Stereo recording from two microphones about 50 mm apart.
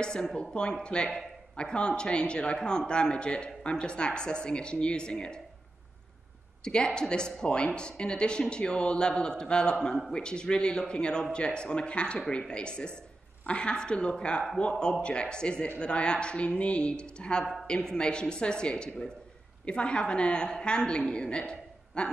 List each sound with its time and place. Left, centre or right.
0.0 s speech: centre
6.6 s speech: centre